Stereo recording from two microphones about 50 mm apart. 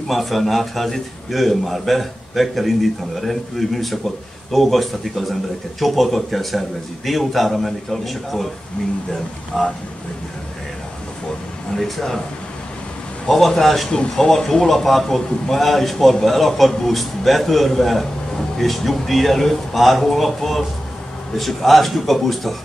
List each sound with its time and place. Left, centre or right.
0.1 s a man's voice: centre
9.5 s speech: centre
11.7 s speech: centre
13.3 s a man's voice: centre
13.8 s a man's voice: centre